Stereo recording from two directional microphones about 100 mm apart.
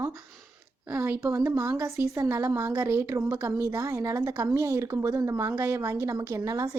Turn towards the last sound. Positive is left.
turn(degrees=-30)  # may be behind; listen again after turning